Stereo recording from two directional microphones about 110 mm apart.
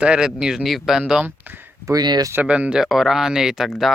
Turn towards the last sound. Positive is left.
turn(degrees=0)  # may be behind; listen again after turning